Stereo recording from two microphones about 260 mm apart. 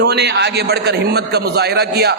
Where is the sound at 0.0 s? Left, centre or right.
Right.